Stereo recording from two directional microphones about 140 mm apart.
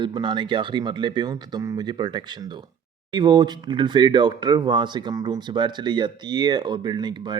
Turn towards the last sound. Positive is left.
turn(degrees=-30)  # may be behind; listen again after turning